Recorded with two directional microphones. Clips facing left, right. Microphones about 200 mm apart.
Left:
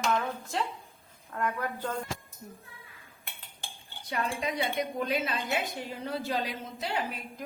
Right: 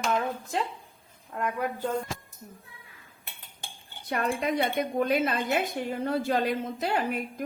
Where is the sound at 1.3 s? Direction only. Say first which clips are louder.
Right 1 dB; 20° right (ahead or behind).